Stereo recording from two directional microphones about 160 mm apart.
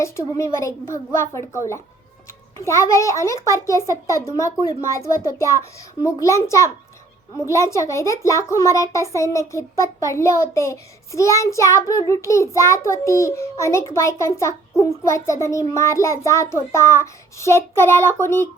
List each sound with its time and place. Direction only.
0.0 s a child's voice: 20° left (ahead or behind)